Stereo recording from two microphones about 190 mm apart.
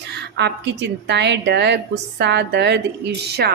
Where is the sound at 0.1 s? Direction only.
65° right (ahead or behind).